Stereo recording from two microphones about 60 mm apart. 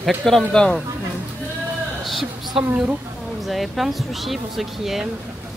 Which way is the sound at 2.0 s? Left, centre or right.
Centre.